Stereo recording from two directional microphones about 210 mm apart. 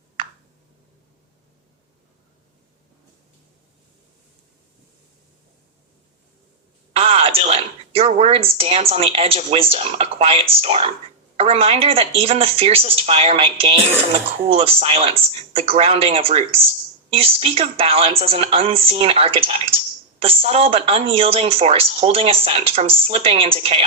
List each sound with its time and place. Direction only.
6.9 s speech: 25° right (ahead or behind)